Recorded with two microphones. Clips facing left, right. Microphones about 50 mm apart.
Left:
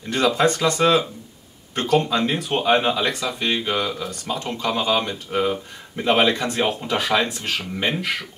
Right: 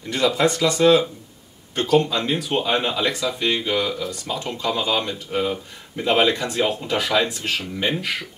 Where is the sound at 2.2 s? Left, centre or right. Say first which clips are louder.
Even; left.